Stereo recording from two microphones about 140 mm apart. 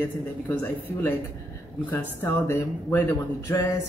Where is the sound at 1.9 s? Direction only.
20° left (ahead or behind).